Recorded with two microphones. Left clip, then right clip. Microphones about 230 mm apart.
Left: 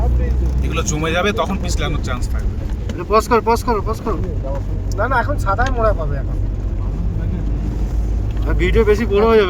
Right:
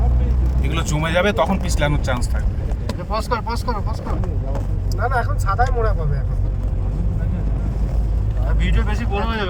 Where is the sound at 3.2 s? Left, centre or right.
Centre.